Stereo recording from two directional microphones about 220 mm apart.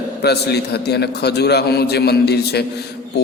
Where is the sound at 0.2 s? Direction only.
50° left (ahead or behind).